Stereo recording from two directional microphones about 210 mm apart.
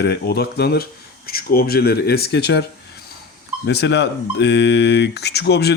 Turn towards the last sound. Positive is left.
turn(degrees=50)  # may be behind; listen again after turning